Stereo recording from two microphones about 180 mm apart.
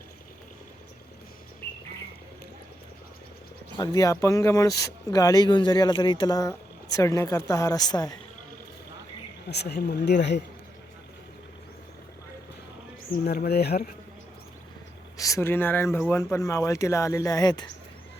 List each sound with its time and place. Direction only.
3.8 s speech: 20° left (ahead or behind)
9.5 s speech: 65° left (ahead or behind)
13.2 s speech: 65° left (ahead or behind)
15.2 s speech: 15° left (ahead or behind)